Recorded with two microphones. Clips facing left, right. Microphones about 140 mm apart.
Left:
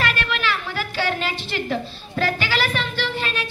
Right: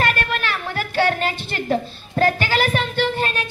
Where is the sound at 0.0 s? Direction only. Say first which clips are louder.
Right 2 dB; 50° right (ahead or behind).